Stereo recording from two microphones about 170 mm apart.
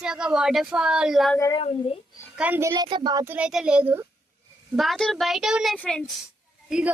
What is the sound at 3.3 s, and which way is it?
A child's voice, 5° right (ahead or behind).